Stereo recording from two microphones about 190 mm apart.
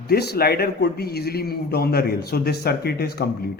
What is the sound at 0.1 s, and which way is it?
Speech, 55° left (ahead or behind).